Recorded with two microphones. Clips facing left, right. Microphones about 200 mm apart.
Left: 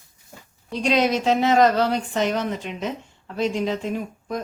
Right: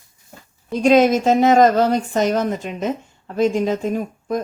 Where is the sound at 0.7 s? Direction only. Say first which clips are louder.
Right 7 dB; 45° right (ahead or behind).